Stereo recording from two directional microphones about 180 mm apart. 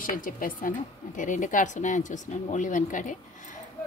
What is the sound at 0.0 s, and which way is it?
A woman's voice, 50° left (ahead or behind).